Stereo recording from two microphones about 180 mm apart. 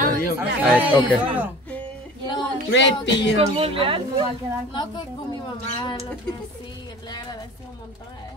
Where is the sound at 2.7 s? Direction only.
90° left.